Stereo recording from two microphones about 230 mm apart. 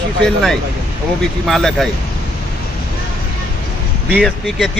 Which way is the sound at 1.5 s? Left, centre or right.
Centre.